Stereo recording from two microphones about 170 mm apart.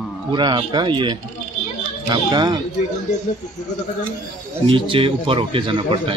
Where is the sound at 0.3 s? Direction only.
25° right (ahead or behind).